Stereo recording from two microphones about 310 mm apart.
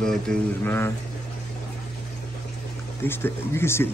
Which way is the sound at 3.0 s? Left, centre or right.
Centre.